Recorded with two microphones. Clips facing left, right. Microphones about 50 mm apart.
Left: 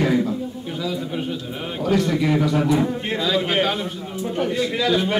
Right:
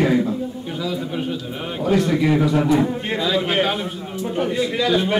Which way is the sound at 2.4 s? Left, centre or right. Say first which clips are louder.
Right 2 dB; centre.